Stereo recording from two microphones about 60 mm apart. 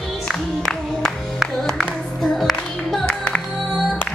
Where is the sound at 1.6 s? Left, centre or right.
Centre.